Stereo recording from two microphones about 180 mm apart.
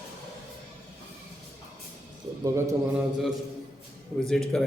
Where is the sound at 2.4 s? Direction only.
15° right (ahead or behind).